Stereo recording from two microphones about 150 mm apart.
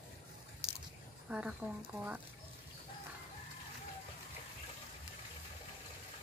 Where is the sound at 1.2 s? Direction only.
10° right (ahead or behind).